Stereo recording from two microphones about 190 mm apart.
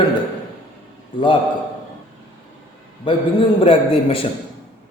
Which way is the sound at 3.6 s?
30° left (ahead or behind).